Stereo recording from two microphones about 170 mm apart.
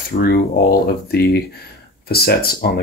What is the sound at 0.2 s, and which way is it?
Speech, 65° left (ahead or behind).